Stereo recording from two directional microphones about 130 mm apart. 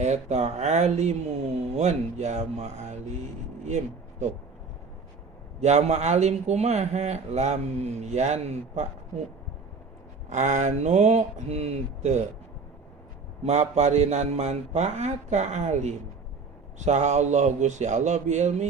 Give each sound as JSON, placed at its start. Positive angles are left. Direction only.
{"t": 0.0, "sound": "speech", "side_deg": -60}
{"t": 5.5, "sound": "speech", "side_deg": -60}
{"t": 10.2, "sound": "speech", "side_deg": -65}
{"t": 13.4, "sound": "speech", "side_deg": -60}